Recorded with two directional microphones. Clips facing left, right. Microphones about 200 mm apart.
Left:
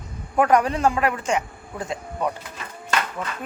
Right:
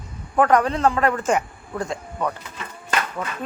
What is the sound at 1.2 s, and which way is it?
Speech, 50° right (ahead or behind).